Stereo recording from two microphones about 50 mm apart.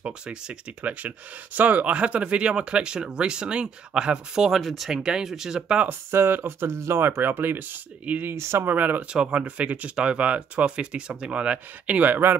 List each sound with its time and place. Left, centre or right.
0.0 s speech: right
4.5 s speech: centre
4.8 s speech: centre
5.9 s speech: right
8.4 s speech: right
8.6 s speech: right
9.1 s speech: right
12.1 s speech: right